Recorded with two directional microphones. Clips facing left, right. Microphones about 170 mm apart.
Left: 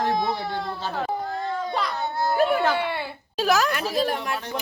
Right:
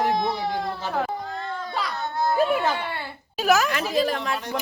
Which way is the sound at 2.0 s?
5° left (ahead or behind).